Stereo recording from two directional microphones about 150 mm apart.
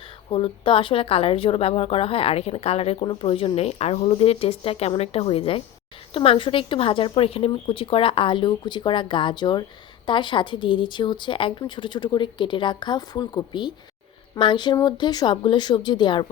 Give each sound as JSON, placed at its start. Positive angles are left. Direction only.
{"t": 0.3, "sound": "speech", "side_deg": 35}